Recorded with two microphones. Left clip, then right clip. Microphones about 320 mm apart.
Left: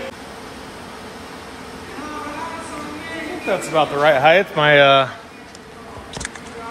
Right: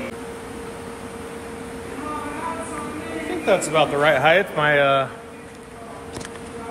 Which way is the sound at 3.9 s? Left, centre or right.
Centre.